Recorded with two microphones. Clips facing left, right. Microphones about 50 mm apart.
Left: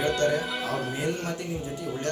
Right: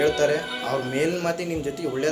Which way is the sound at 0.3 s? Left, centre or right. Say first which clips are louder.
Right 2 dB; centre.